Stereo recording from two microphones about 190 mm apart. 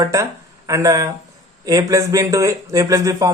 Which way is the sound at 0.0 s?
15° right (ahead or behind).